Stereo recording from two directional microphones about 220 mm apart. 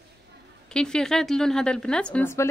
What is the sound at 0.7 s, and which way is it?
A woman's voice, 5° left (ahead or behind).